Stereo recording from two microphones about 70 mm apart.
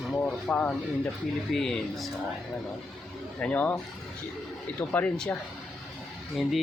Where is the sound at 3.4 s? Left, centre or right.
Left.